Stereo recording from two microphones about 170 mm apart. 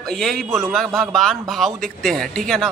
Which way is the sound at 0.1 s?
Centre (ahead or behind).